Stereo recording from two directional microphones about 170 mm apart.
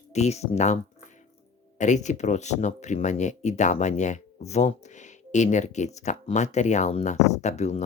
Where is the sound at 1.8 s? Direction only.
45° left (ahead or behind).